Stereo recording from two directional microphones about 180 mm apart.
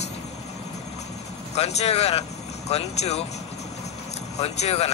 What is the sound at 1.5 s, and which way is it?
Speech, 35° left (ahead or behind).